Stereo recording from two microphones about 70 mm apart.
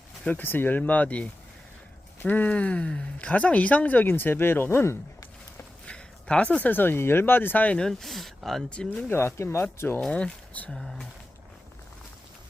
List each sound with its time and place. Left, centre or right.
0.3 s speech: left
5.8 s speech: centre
7.8 s speech: centre
8.7 s speech: centre
9.0 s speech: left
10.1 s speech: centre